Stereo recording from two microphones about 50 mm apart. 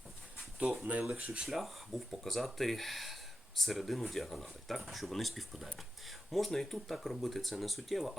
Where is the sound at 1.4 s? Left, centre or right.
Centre.